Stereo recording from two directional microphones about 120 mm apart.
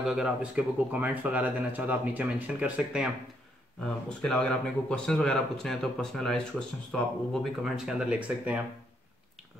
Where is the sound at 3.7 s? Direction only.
10° left (ahead or behind); by 8.6 s 10° right (ahead or behind).